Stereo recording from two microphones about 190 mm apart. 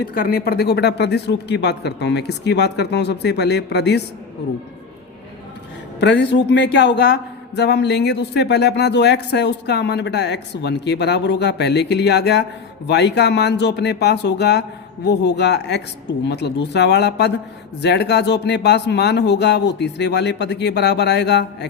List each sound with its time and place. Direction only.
0.1 s a man's voice: 50° left (ahead or behind)
6.0 s a man's voice: 65° left (ahead or behind)